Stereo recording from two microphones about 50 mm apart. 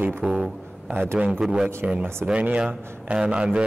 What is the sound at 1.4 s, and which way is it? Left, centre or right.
Speech, centre.